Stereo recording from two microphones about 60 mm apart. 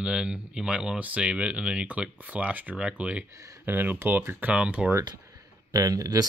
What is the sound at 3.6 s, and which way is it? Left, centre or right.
Speech, right.